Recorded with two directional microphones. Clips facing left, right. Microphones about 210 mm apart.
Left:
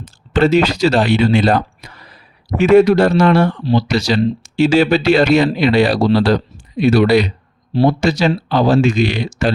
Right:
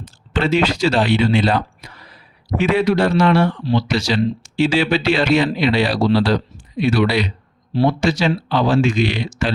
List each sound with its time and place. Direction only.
0.3 s speech: 40° left (ahead or behind)